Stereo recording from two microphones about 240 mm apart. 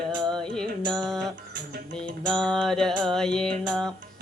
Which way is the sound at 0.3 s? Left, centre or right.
Centre.